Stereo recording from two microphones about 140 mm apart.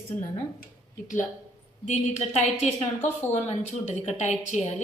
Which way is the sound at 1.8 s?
55° left (ahead or behind).